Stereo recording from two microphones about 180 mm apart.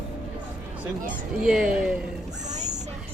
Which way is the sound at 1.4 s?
5° right (ahead or behind).